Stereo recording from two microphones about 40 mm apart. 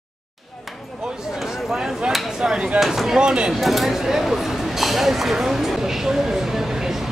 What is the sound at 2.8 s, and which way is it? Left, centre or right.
Speech, centre.